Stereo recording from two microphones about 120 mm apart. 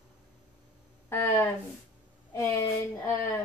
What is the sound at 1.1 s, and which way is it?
A woman's voice, 20° left (ahead or behind).